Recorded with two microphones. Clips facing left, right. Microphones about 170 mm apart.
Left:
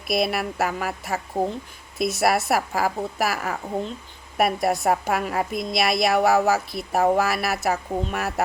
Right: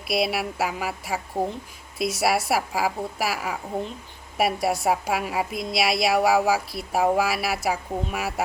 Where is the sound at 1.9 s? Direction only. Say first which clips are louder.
Left 2 dB; 50° left (ahead or behind).